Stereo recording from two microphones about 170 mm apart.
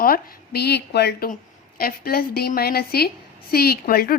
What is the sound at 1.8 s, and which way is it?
A woman's voice, 60° left (ahead or behind).